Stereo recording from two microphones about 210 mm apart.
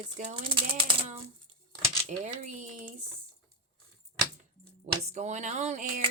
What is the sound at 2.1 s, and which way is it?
Typewriter, 35° right (ahead or behind).